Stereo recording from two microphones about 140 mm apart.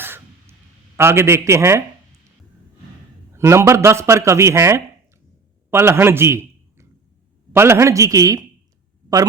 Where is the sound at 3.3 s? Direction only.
20° right (ahead or behind).